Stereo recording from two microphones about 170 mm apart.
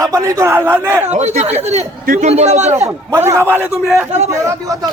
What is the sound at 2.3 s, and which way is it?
Speech, 40° right (ahead or behind).